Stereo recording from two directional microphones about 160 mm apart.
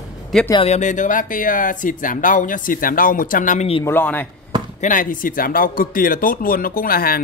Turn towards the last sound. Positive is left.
turn(degrees=65)  # may be behind; listen again after turning